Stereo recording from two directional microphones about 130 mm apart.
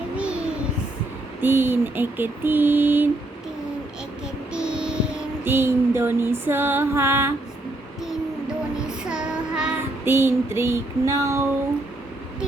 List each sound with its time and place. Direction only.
0.2 s child singing: 10° right (ahead or behind)
1.4 s a sound: 15° right (ahead or behind)
4.5 s child singing: 5° right (ahead or behind)
5.5 s music: 20° right (ahead or behind)
9.0 s child singing: 5° right (ahead or behind)
10.1 s music: 20° right (ahead or behind)